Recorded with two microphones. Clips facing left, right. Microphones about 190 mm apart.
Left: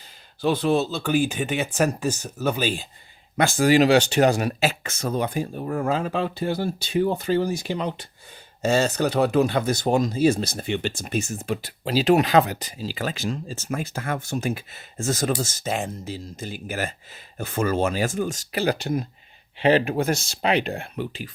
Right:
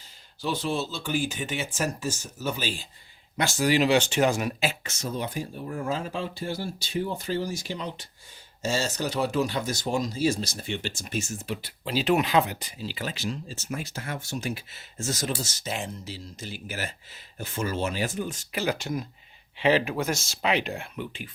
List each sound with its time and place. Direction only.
0.4 s speech: 60° left (ahead or behind)
18.7 s speech: 35° left (ahead or behind)
19.8 s speech: 55° left (ahead or behind)
20.4 s speech: 40° left (ahead or behind)